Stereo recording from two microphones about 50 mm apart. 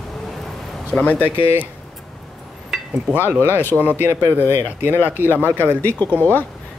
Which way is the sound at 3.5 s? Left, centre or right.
Left.